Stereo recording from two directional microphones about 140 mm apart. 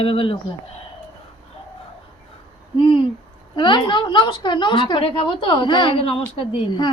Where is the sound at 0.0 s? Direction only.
40° left (ahead or behind).